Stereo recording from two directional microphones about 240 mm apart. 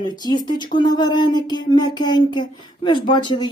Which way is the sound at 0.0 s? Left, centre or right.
Centre.